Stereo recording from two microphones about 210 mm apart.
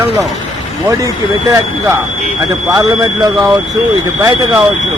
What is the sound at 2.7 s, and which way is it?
Speech, 20° right (ahead or behind).